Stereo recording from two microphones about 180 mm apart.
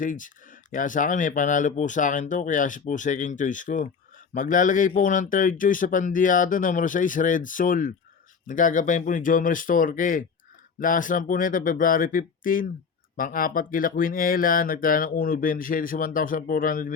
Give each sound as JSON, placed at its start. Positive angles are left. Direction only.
{"t": 0.0, "sound": "speech", "side_deg": 45}